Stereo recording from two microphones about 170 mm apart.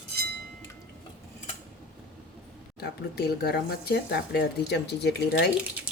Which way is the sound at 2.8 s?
70° left (ahead or behind).